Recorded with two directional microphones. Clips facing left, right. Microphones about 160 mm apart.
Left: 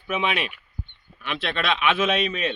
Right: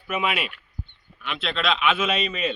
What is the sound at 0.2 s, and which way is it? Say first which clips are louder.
Speech: right 1 dB; 5° right (ahead or behind).